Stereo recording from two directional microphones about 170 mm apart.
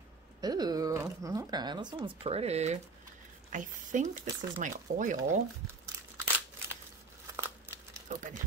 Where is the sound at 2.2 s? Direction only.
35° right (ahead or behind).